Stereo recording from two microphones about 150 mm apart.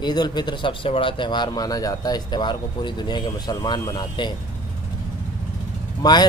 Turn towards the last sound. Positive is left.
turn(degrees=30)  # may be behind; listen again after turning